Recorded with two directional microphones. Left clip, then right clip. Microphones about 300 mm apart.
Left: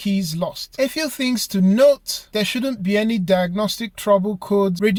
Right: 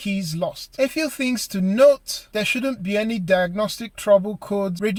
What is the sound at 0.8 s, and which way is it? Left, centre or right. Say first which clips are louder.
Speech: left 1 dB; left.